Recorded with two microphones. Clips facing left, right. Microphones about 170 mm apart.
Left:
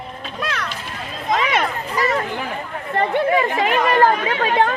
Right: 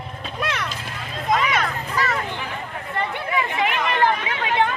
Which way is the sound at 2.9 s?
45° left (ahead or behind).